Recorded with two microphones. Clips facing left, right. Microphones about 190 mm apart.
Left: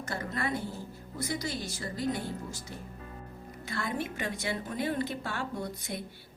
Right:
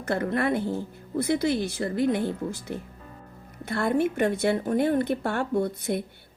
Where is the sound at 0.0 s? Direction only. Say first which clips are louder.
Right 9 dB; 60° right (ahead or behind).